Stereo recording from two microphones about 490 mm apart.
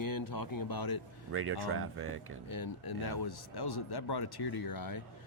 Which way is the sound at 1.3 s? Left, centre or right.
Right.